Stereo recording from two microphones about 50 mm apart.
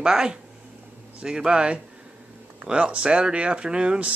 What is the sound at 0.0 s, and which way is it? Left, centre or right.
Speech, centre.